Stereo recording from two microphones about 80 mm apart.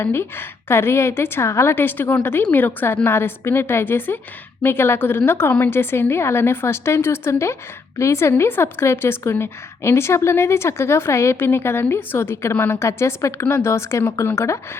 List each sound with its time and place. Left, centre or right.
0.0 s a woman's voice: left